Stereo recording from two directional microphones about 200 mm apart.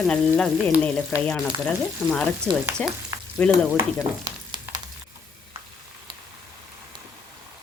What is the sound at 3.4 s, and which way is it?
Speech, 5° left (ahead or behind).